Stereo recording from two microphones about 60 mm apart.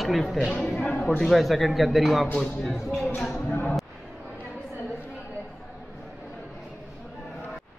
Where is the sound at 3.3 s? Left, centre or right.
Left.